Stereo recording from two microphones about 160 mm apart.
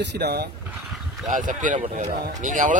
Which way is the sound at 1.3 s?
55° right (ahead or behind).